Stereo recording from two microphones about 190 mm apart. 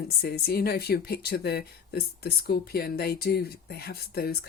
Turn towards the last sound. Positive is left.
turn(degrees=55)  # may be behind; listen again after turning